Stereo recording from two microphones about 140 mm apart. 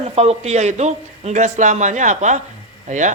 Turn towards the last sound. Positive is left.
turn(degrees=-60)  # may be behind; listen again after turning